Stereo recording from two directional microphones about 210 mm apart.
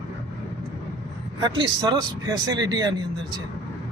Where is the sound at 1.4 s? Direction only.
20° right (ahead or behind).